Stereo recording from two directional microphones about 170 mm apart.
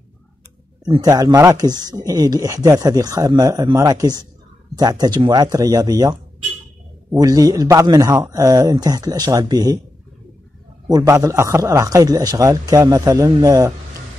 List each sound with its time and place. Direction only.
0.8 s speech: 25° right (ahead or behind)
7.2 s speech: 20° right (ahead or behind)
10.9 s speech: 20° right (ahead or behind)